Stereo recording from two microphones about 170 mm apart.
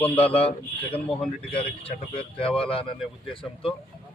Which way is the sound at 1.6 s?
35° left (ahead or behind).